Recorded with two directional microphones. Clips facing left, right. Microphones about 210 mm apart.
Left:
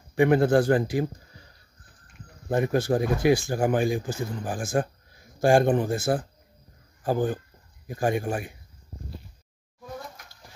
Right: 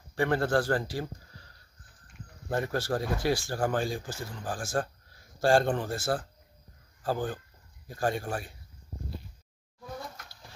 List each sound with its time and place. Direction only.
0.1 s speech: 15° left (ahead or behind)
2.5 s a man's voice: 15° left (ahead or behind)